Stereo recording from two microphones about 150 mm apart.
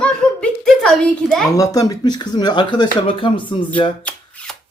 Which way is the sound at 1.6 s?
25° left (ahead or behind).